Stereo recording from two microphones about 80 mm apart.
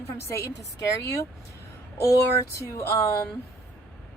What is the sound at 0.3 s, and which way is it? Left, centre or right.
A woman's voice, left.